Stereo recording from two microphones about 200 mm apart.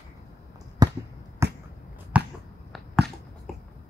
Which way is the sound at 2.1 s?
5° right (ahead or behind).